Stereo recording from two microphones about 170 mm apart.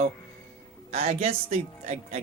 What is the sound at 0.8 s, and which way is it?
Speech, 40° right (ahead or behind).